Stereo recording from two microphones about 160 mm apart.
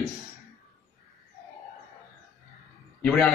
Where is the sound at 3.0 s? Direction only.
5° left (ahead or behind).